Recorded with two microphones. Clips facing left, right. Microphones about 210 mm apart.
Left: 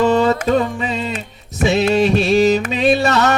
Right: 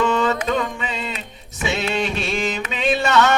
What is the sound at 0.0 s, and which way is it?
Music, 35° left (ahead or behind).